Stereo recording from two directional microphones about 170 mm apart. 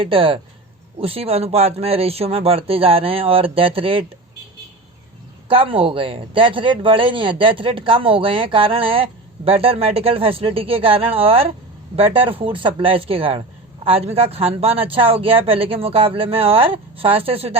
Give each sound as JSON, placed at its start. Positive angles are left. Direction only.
{"t": 0.0, "sound": "speech", "side_deg": -30}
{"t": 5.5, "sound": "speech", "side_deg": -30}